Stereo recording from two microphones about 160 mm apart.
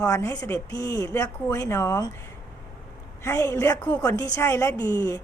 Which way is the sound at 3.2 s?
20° left (ahead or behind).